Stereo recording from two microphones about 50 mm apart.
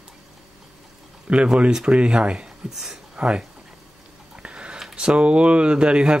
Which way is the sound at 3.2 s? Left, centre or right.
Centre.